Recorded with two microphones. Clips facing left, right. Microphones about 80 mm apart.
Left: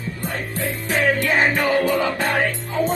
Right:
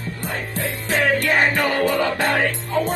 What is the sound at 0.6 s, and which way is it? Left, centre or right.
Music, right.